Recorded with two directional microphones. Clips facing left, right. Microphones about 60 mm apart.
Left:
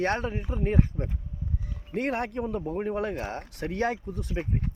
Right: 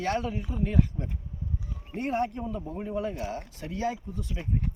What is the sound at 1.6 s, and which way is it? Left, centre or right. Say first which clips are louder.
A man's voice: left 3 dB; left.